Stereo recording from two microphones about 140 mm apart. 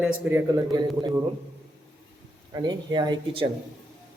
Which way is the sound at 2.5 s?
30° right (ahead or behind).